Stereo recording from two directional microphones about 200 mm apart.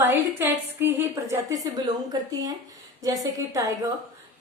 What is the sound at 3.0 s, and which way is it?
Speech, 15° right (ahead or behind).